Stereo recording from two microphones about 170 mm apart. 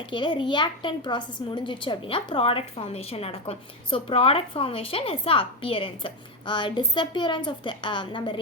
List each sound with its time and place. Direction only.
0.1 s a woman's voice: 30° left (ahead or behind)